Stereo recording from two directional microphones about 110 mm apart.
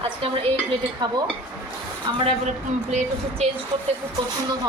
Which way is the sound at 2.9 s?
90° right.